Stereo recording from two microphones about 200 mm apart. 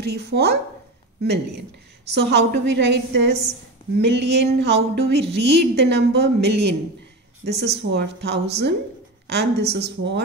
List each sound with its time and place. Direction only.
0.0 s a woman's voice: 55° right (ahead or behind)